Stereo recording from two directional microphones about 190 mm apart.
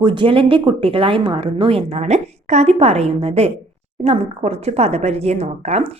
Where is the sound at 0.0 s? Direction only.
25° right (ahead or behind).